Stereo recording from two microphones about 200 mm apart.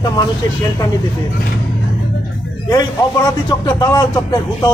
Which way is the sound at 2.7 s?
20° left (ahead or behind).